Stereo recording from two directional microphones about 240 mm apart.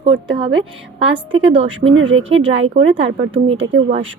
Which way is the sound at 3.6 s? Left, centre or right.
Right.